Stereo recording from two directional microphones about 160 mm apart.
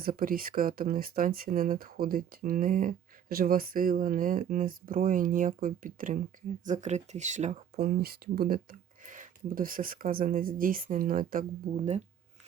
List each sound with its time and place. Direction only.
0.0 s speech: 65° right (ahead or behind)
6.7 s speech: 45° right (ahead or behind)
7.8 s speech: 75° right (ahead or behind)
9.0 s speech: 55° right (ahead or behind)